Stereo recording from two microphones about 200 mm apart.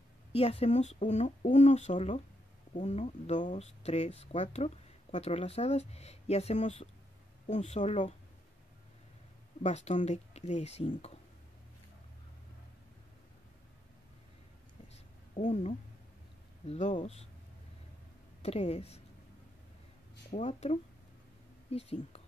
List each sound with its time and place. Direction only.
0.3 s speech: 30° left (ahead or behind)
9.6 s speech: 35° left (ahead or behind)
15.3 s speech: 35° left (ahead or behind)
18.4 s speech: 30° left (ahead or behind)
20.2 s speech: 35° left (ahead or behind)